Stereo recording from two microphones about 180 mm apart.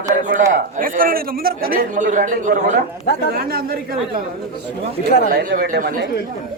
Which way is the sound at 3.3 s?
60° right (ahead or behind).